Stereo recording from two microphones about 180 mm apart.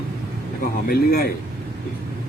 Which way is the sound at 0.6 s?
55° left (ahead or behind).